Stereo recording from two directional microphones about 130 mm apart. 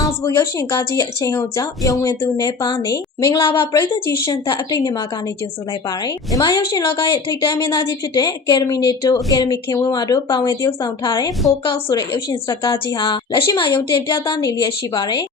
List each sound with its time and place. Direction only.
0.0 s a woman's voice: 25° left (ahead or behind)
12.9 s a woman's voice: 30° left (ahead or behind)